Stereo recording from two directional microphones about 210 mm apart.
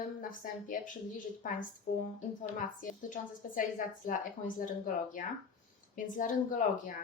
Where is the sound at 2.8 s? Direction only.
40° left (ahead or behind).